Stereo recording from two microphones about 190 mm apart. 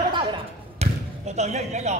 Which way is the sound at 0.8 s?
35° right (ahead or behind).